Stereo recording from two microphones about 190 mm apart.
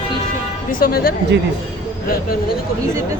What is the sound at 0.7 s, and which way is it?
Speech, 50° left (ahead or behind).